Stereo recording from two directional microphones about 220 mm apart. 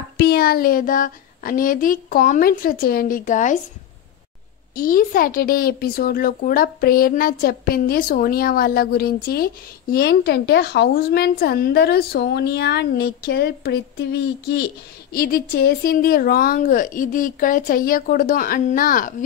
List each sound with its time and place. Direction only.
0.2 s a woman's voice: 45° left (ahead or behind)
4.7 s a woman's voice: 40° left (ahead or behind)